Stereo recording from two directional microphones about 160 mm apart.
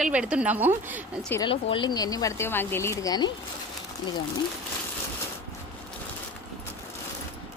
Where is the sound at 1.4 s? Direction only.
30° left (ahead or behind).